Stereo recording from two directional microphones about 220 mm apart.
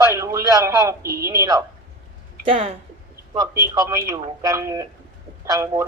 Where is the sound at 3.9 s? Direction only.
15° right (ahead or behind).